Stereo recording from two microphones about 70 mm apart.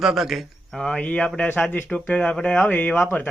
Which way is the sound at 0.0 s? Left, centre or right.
Centre.